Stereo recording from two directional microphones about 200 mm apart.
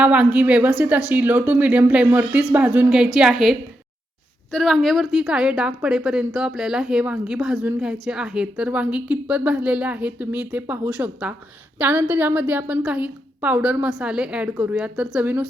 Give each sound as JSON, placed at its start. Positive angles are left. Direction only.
{"t": 0.0, "sound": "a woman's voice", "side_deg": -5}